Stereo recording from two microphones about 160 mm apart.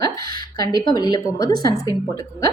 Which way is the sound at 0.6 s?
25° left (ahead or behind).